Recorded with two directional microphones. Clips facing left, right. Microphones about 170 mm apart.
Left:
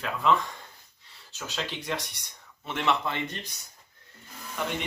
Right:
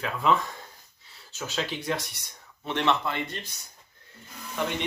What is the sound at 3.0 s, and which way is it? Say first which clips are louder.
Speech: right 1 dB; 20° left (ahead or behind).